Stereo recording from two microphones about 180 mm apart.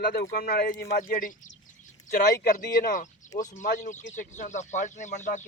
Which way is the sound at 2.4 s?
50° left (ahead or behind).